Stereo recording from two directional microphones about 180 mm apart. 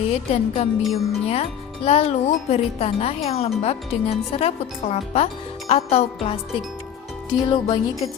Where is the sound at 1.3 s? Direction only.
35° left (ahead or behind).